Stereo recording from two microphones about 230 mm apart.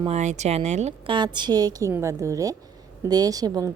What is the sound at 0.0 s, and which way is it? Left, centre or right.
A woman's voice, right.